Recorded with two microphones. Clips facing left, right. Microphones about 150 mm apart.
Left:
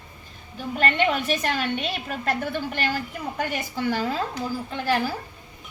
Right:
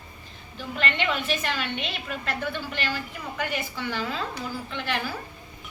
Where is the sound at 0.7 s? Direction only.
45° left (ahead or behind).